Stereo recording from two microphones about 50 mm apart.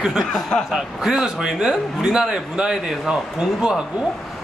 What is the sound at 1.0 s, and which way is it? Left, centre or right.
A man's voice, centre.